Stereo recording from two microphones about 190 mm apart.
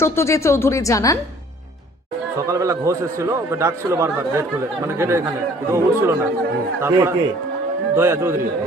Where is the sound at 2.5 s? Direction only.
15° right (ahead or behind).